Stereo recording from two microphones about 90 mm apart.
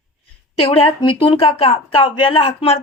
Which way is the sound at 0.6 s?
90° left.